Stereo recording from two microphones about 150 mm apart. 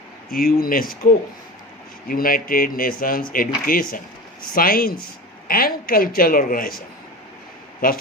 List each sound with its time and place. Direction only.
0.3 s speech: 80° left